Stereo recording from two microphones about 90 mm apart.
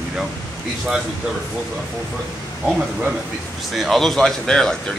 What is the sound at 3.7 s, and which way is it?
Speech, centre (ahead or behind).